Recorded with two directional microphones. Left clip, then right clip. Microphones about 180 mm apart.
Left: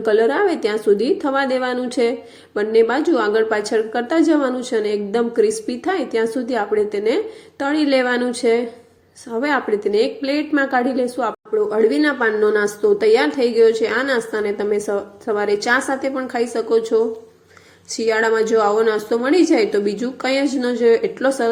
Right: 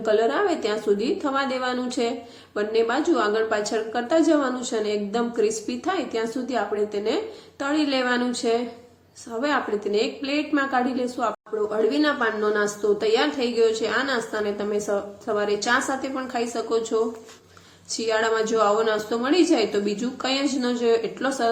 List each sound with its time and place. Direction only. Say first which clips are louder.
0.0 s a woman's voice: left 5 dB; 30° left (ahead or behind)